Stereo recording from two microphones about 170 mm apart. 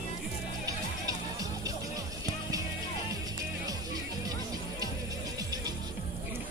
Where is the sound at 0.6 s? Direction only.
20° right (ahead or behind).